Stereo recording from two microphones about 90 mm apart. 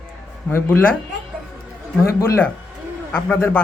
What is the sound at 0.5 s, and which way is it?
Speech, 25° left (ahead or behind).